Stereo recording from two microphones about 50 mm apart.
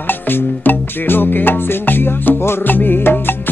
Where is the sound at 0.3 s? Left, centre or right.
Left.